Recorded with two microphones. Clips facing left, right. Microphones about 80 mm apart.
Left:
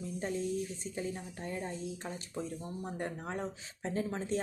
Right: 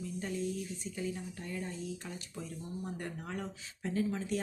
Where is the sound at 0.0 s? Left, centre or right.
Left.